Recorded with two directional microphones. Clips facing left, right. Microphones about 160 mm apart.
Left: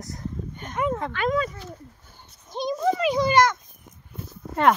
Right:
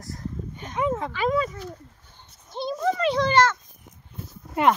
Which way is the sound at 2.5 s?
15° left (ahead or behind).